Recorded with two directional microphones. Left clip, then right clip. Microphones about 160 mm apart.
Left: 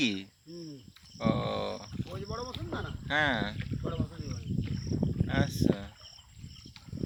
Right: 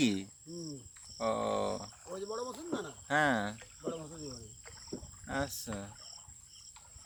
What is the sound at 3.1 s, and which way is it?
Speech, 15° right (ahead or behind).